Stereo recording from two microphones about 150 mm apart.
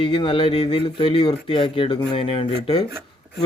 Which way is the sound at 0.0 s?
35° left (ahead or behind).